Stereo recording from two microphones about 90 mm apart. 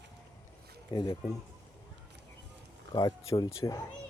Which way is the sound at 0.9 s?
45° left (ahead or behind).